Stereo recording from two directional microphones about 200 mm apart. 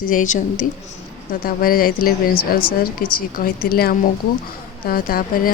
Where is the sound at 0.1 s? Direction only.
40° left (ahead or behind).